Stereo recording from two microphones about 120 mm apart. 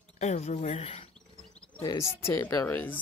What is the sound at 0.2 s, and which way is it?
Speech, 75° left (ahead or behind).